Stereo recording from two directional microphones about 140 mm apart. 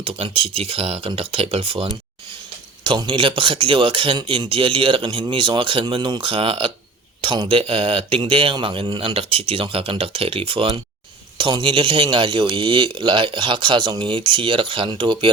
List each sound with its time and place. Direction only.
0.0 s speech: 40° right (ahead or behind)